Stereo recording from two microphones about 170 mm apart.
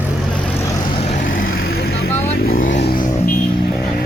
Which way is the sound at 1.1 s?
50° left (ahead or behind).